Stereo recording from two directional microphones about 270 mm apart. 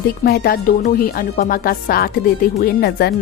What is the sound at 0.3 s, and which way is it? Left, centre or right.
Speech, left.